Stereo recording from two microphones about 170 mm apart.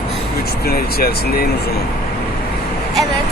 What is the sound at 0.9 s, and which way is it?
Speech, 65° left (ahead or behind).